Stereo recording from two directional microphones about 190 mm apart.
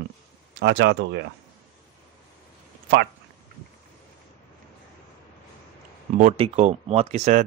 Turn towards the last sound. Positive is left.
turn(degrees=-35)  # may be behind; listen again after turning